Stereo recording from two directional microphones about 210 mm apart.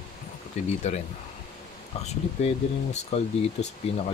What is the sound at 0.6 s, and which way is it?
Speech, 30° left (ahead or behind).